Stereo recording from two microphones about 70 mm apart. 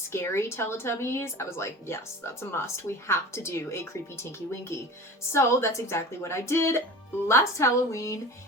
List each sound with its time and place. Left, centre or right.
0.1 s a woman's voice: left